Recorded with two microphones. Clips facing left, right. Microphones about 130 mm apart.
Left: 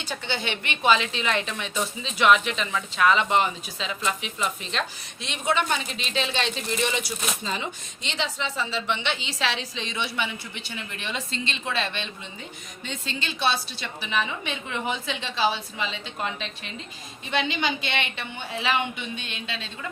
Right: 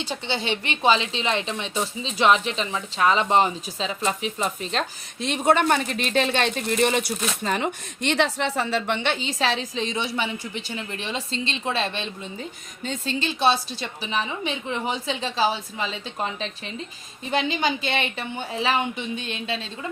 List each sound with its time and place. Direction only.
0.0 s a woman's voice: 30° right (ahead or behind)